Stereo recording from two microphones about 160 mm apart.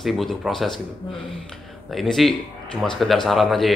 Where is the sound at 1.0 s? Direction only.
25° left (ahead or behind).